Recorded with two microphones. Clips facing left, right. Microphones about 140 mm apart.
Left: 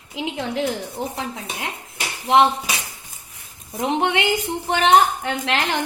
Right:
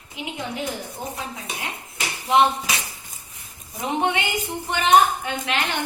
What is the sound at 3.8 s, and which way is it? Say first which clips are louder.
Speech: left 3 dB; 90° left.